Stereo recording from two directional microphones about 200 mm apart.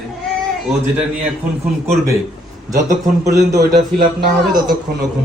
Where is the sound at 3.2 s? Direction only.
15° right (ahead or behind).